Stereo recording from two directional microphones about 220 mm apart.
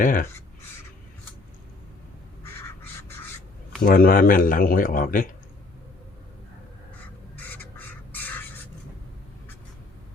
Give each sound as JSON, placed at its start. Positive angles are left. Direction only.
{"t": 0.0, "sound": "speech", "side_deg": 40}
{"t": 2.4, "sound": "duck", "side_deg": 10}
{"t": 3.8, "sound": "speech", "side_deg": 40}
{"t": 7.3, "sound": "bird", "side_deg": 10}